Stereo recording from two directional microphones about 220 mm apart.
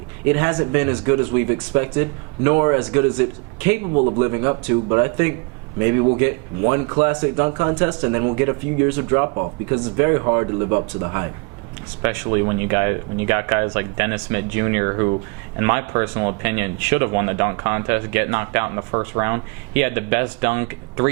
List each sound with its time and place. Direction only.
0.3 s speech: 10° right (ahead or behind)
3.9 s a man's voice: 25° right (ahead or behind)